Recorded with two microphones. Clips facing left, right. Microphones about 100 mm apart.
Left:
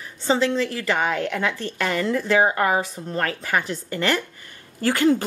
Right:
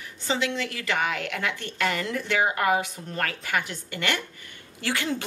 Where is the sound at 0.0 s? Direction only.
35° left (ahead or behind).